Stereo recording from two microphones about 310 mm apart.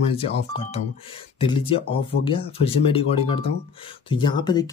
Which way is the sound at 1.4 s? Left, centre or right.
Centre.